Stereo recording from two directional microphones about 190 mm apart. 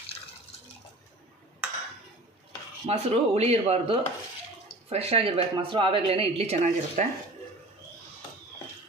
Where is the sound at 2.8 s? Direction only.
35° right (ahead or behind).